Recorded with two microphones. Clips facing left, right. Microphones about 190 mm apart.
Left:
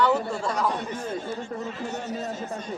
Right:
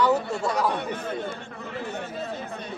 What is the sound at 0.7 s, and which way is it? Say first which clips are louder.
Speech: right 1 dB; 60° right (ahead or behind).